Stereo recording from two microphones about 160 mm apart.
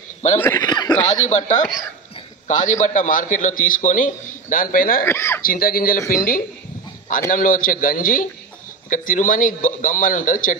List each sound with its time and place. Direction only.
0.4 s chuckle: 20° left (ahead or behind)
1.0 s a man's voice: 50° left (ahead or behind)
5.0 s speech: 15° left (ahead or behind)
5.4 s a man's voice: 65° left (ahead or behind)